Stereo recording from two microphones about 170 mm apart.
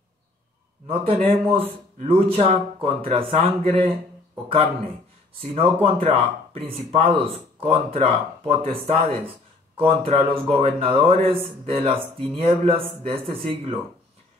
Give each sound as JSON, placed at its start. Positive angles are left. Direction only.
{"t": 0.8, "sound": "speech", "side_deg": -35}
{"t": 5.4, "sound": "speech", "side_deg": -35}